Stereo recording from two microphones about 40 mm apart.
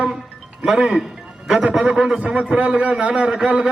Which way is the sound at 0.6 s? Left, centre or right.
Centre.